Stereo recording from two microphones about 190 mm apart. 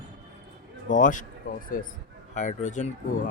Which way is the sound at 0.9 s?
45° left (ahead or behind).